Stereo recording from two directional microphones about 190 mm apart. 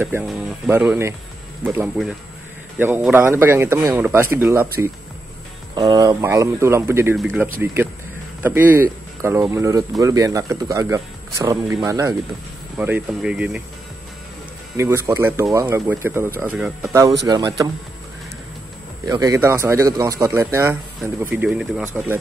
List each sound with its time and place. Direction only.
0.0 s speech: 10° right (ahead or behind)
5.8 s speech: 20° right (ahead or behind)
8.4 s speech: 10° right (ahead or behind)
14.8 s speech: 15° right (ahead or behind)
17.3 s speech: 20° right (ahead or behind)
19.0 s speech: 20° right (ahead or behind)